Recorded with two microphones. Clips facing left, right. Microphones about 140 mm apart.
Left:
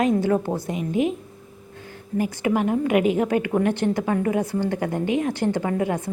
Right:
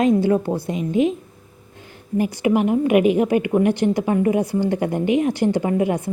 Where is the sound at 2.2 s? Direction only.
15° right (ahead or behind).